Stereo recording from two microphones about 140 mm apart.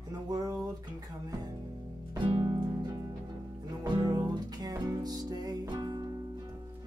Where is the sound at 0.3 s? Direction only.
25° right (ahead or behind).